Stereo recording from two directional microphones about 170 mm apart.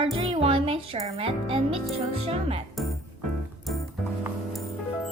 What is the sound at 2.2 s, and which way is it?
Speech, 35° right (ahead or behind).